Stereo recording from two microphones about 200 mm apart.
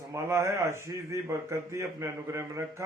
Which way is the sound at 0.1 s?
15° right (ahead or behind).